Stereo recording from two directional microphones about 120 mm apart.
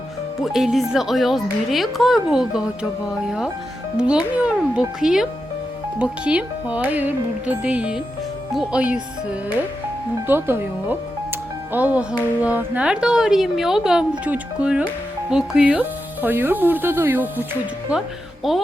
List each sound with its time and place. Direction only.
0.4 s a woman's voice: centre (ahead or behind)
10.2 s a woman's voice: 20° right (ahead or behind); by 18.6 s centre (ahead or behind)